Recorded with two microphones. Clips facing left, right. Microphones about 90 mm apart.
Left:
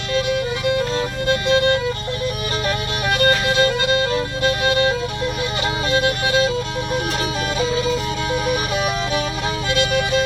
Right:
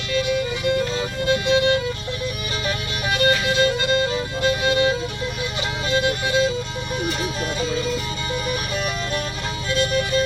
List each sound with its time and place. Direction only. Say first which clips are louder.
0.7 s music: left 2 dB; 50° left (ahead or behind)
7.6 s music: left 5 dB; 75° left (ahead or behind)